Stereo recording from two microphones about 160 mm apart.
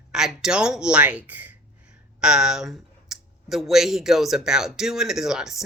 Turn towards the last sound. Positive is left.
turn(degrees=-5)  # may be behind; listen again after turning